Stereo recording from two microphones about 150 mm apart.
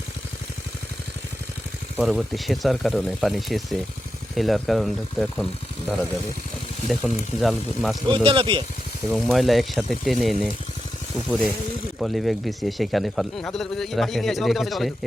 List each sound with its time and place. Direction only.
2.0 s a man's voice: centre (ahead or behind)
7.3 s a man's voice: centre (ahead or behind)
8.0 s speech: 35° right (ahead or behind)
9.0 s a man's voice: centre (ahead or behind)